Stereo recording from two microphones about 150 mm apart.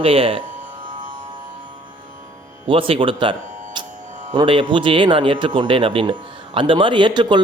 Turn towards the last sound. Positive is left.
turn(degrees=-30)  # may be behind; listen again after turning